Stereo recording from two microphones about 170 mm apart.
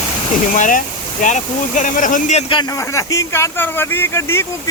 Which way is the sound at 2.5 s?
30° left (ahead or behind).